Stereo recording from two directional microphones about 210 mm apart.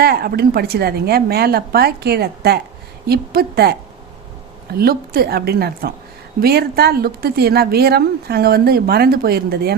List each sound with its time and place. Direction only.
0.0 s speech: 50° right (ahead or behind)